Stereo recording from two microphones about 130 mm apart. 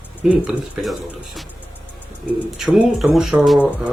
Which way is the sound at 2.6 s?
5° right (ahead or behind).